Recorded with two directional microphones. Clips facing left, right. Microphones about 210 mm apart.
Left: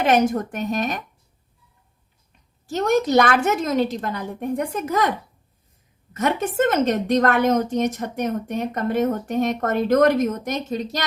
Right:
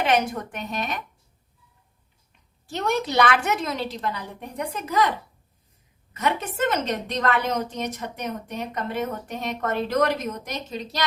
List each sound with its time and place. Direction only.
0.0 s a woman's voice: 45° left (ahead or behind)
2.6 s a woman's voice: 45° left (ahead or behind)
6.1 s a woman's voice: 45° left (ahead or behind)